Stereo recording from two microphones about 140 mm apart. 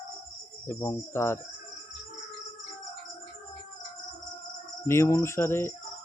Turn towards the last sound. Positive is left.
turn(degrees=15)  # may be behind; listen again after turning